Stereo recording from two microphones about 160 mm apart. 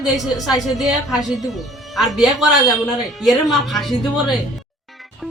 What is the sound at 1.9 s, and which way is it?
A man's voice, centre (ahead or behind).